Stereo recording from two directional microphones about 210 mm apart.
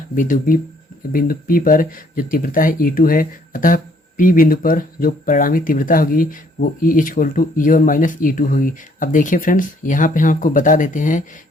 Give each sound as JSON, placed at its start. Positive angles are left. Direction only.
{"t": 0.2, "sound": "speech", "side_deg": 40}